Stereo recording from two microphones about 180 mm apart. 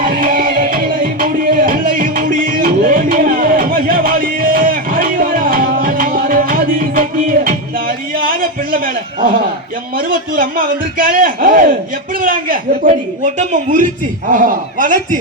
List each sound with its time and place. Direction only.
0.0 s music: 50° right (ahead or behind)
10.1 s speech: 50° right (ahead or behind)